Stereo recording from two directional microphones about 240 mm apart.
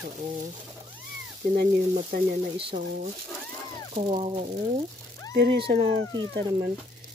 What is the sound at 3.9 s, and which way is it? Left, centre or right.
Speech, right.